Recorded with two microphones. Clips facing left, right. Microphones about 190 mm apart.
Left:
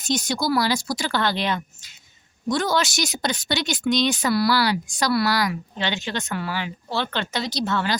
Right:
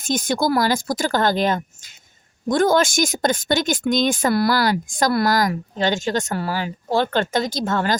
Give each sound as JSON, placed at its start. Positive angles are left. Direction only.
{"t": 0.0, "sound": "a woman's voice", "side_deg": -50}